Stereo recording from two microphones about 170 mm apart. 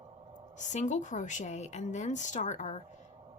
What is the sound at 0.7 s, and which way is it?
A woman's voice, 45° left (ahead or behind).